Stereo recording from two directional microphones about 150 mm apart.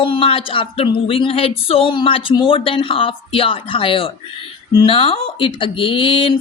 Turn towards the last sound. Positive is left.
turn(degrees=35)  # may be behind; listen again after turning